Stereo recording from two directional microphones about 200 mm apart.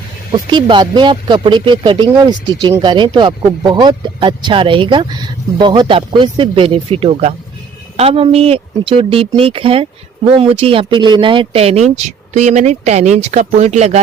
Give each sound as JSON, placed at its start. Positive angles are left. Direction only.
{"t": 0.5, "sound": "speech", "side_deg": -25}